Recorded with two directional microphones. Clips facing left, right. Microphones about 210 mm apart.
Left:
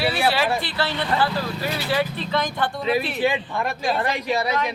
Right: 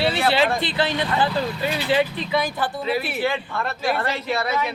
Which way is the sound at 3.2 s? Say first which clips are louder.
Left 2 dB; 15° left (ahead or behind).